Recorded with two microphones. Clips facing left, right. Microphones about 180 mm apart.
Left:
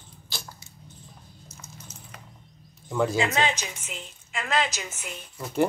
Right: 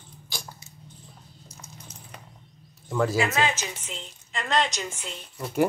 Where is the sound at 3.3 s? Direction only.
15° left (ahead or behind).